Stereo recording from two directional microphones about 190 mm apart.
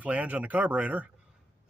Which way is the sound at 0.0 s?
10° right (ahead or behind).